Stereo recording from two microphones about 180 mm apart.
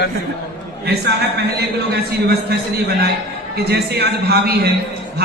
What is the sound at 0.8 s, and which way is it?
A man's voice, 65° right (ahead or behind).